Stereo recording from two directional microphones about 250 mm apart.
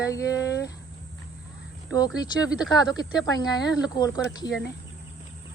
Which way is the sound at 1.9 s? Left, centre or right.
Centre.